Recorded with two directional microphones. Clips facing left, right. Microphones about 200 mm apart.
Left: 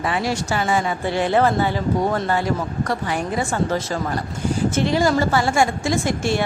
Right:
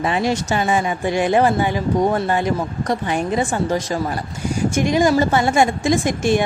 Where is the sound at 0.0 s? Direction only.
20° right (ahead or behind).